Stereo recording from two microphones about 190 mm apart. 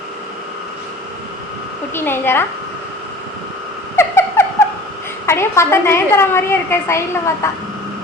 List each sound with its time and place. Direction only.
2.0 s a woman's voice: 10° left (ahead or behind)
3.9 s a sound: 15° left (ahead or behind)
5.2 s a woman's voice: 15° left (ahead or behind)